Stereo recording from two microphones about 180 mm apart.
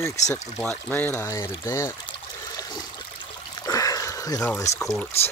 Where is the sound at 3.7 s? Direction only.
20° left (ahead or behind).